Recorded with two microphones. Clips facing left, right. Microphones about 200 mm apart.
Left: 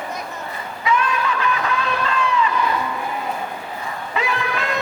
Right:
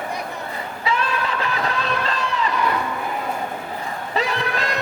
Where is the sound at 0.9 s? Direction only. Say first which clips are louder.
Left 3 dB; 35° right (ahead or behind).